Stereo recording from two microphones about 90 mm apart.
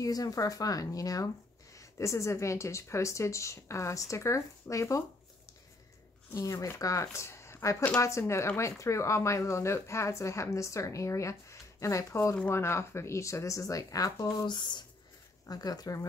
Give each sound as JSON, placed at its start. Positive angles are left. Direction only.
{"t": 0.0, "sound": "speech", "side_deg": 40}
{"t": 6.3, "sound": "speech", "side_deg": 35}
{"t": 14.4, "sound": "speech", "side_deg": 55}
{"t": 15.4, "sound": "speech", "side_deg": 45}